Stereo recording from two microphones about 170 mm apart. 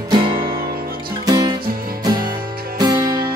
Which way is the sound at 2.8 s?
25° right (ahead or behind).